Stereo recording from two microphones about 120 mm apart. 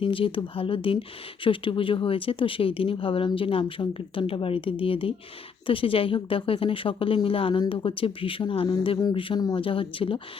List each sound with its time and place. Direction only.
0.0 s speech: 45° left (ahead or behind)